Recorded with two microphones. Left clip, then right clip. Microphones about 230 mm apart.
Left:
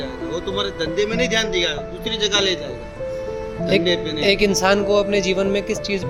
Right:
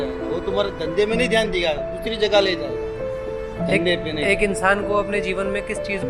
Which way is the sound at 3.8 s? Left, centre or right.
Left.